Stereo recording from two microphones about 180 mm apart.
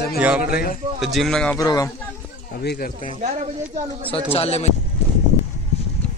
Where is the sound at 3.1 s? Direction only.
35° right (ahead or behind).